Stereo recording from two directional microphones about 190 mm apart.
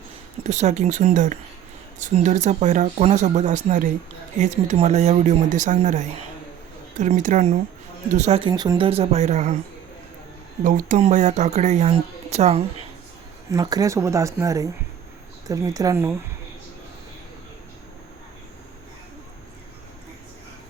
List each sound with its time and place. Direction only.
0.4 s speech: 35° right (ahead or behind)
10.6 s speech: 40° right (ahead or behind)
13.5 s speech: 20° right (ahead or behind)